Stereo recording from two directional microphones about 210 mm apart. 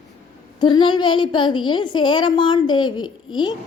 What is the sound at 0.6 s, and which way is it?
A woman's voice, 20° left (ahead or behind).